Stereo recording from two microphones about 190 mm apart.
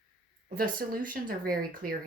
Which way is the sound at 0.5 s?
50° right (ahead or behind).